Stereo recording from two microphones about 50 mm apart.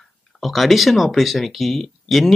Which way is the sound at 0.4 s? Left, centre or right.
Centre.